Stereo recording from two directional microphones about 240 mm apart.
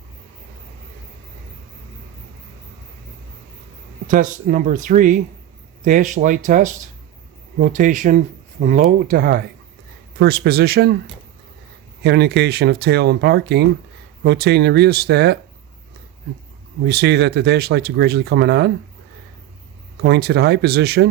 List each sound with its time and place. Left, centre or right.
4.0 s speech: right
12.0 s speech: right
16.8 s speech: right
20.0 s speech: right